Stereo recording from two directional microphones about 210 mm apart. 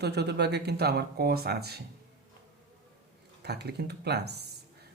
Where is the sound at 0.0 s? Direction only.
50° right (ahead or behind).